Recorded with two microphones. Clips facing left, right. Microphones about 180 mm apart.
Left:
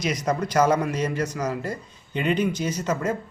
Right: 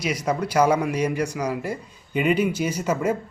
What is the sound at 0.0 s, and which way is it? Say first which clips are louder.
Speech: even; 10° right (ahead or behind).